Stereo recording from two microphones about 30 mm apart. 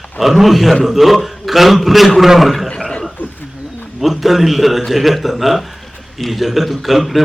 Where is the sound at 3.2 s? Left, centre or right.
Left.